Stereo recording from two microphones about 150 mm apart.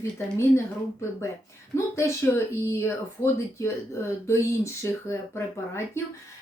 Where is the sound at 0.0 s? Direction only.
20° left (ahead or behind).